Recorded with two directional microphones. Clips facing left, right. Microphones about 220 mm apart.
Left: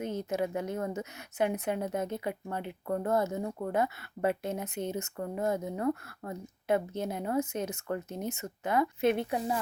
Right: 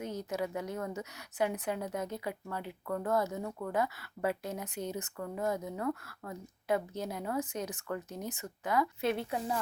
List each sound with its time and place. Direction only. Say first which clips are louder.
0.0 s a woman's voice: left 4 dB; 25° left (ahead or behind)